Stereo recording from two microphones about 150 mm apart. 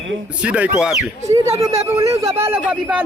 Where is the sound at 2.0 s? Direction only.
20° right (ahead or behind).